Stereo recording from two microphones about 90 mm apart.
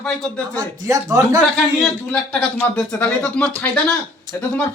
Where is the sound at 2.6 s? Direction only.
15° left (ahead or behind).